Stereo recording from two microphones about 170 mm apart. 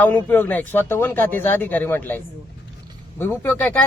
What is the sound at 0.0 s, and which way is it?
Speech, 10° left (ahead or behind).